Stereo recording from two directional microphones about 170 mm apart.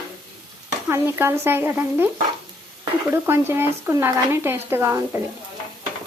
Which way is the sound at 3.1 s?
15° right (ahead or behind).